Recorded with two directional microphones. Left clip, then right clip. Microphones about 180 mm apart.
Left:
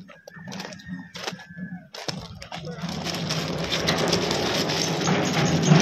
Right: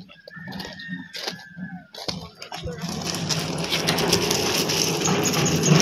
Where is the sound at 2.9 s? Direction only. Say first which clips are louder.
Right 1 dB; 30° left (ahead or behind).